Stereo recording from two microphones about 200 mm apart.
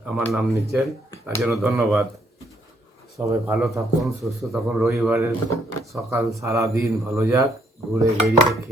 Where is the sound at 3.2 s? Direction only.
10° right (ahead or behind).